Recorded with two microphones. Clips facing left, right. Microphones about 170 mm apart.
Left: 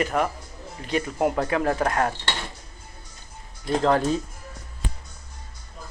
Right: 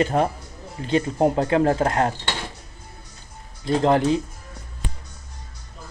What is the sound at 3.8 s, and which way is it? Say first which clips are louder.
Speech: right 3 dB; 20° right (ahead or behind).